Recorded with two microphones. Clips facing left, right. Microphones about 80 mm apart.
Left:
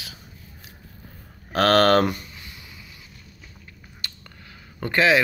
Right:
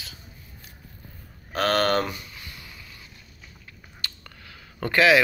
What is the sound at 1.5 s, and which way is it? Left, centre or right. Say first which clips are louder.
Speech: left 5 dB; left.